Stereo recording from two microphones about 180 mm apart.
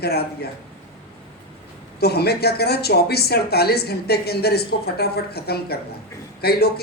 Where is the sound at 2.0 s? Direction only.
60° left (ahead or behind).